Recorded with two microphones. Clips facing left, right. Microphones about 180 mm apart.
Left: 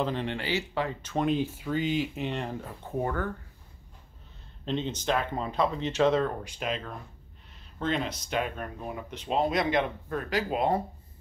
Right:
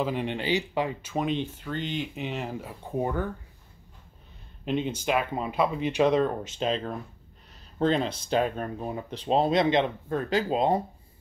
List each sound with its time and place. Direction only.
0.0 s speech: 15° right (ahead or behind)
4.6 s speech: 10° right (ahead or behind)